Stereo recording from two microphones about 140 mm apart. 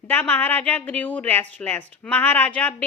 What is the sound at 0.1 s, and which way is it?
Speech, 15° left (ahead or behind).